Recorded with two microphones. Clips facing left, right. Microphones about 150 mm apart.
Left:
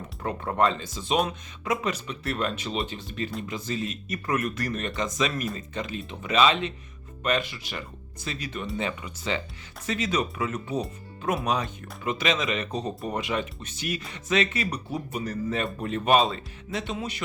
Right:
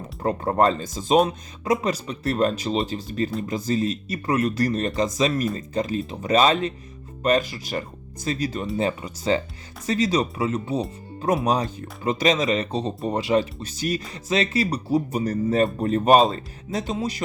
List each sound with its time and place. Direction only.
0.2 s speech: 35° right (ahead or behind)